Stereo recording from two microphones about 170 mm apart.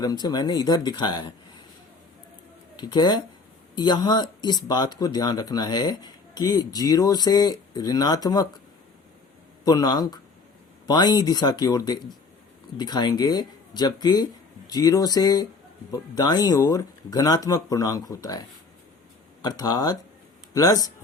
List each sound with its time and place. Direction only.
0.0 s speech: 20° left (ahead or behind)
2.7 s speech: 25° left (ahead or behind)
9.6 s speech: 20° left (ahead or behind)